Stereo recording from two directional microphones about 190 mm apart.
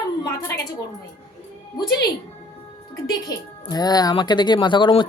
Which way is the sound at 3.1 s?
20° left (ahead or behind).